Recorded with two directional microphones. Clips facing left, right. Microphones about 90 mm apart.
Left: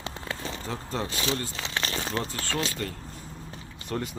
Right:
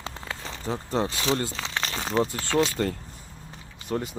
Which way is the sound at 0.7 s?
20° right (ahead or behind).